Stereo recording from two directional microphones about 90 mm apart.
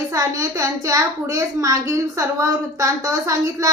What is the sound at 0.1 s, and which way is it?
A woman's voice, 35° right (ahead or behind).